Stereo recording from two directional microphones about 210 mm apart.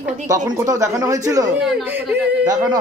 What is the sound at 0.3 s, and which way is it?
Speech, 15° right (ahead or behind).